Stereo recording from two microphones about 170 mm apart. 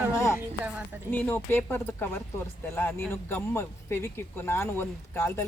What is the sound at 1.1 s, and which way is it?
Speech, 10° left (ahead or behind).